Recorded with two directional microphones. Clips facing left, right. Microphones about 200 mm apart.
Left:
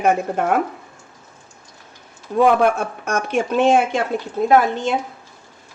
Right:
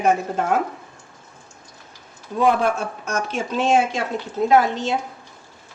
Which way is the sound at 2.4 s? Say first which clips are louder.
Left 4 dB; 55° left (ahead or behind).